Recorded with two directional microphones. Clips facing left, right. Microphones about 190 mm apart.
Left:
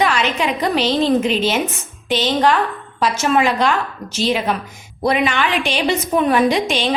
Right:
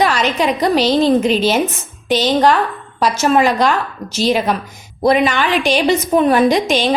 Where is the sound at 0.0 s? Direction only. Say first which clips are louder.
Right 3 dB; 40° right (ahead or behind).